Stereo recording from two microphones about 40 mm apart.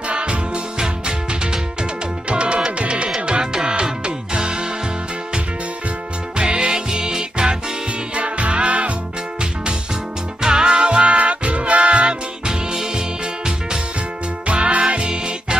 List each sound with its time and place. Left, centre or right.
0.1 s music: right
6.3 s music: right
8.1 s music: right
10.4 s music: centre